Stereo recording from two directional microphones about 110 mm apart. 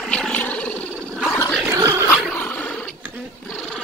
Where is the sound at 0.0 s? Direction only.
5° left (ahead or behind).